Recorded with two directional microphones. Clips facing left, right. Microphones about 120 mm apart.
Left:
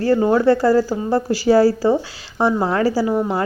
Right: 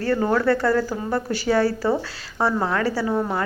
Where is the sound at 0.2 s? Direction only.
25° left (ahead or behind).